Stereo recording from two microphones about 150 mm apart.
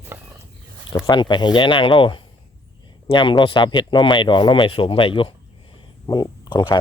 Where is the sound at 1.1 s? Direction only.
30° left (ahead or behind).